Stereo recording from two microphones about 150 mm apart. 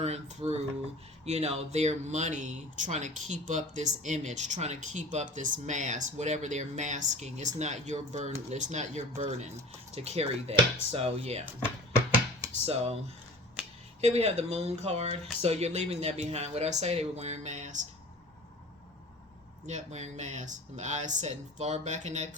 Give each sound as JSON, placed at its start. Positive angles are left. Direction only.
{"t": 0.0, "sound": "speech", "side_deg": -45}
{"t": 12.6, "sound": "speech", "side_deg": -45}
{"t": 14.0, "sound": "speech", "side_deg": -45}
{"t": 19.6, "sound": "speech", "side_deg": -50}